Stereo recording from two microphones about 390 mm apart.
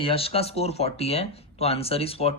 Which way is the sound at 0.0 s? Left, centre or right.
Centre.